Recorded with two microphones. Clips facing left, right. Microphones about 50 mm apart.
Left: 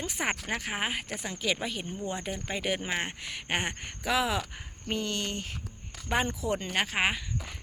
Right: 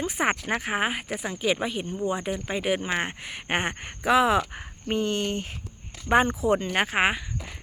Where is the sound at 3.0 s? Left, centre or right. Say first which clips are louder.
Right 4 dB; right.